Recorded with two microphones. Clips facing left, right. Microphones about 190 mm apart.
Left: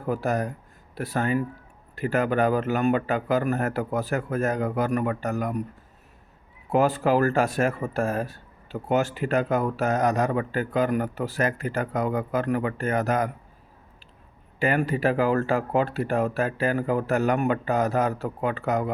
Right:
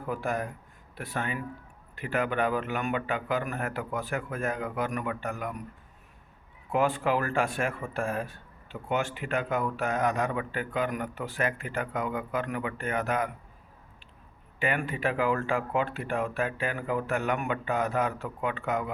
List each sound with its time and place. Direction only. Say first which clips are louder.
0.1 s speech: left 6 dB; 40° left (ahead or behind)
6.7 s speech: left 5 dB; 40° left (ahead or behind)
14.6 s speech: left 6 dB; 40° left (ahead or behind)